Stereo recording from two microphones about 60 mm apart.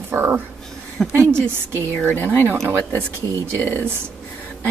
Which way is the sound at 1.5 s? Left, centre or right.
Right.